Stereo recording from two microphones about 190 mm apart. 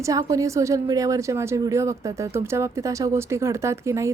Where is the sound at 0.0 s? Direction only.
15° right (ahead or behind).